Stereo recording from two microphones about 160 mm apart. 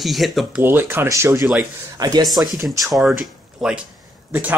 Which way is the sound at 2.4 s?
15° right (ahead or behind).